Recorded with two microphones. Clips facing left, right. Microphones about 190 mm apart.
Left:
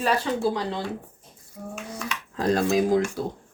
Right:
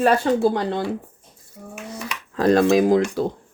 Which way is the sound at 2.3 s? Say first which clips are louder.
Right 6 dB; 75° right (ahead or behind).